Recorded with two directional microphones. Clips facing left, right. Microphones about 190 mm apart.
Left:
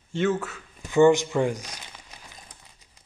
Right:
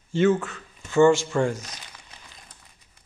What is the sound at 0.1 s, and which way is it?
Speech, centre (ahead or behind).